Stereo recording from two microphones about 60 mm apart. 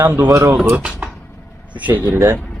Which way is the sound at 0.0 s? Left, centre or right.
Right.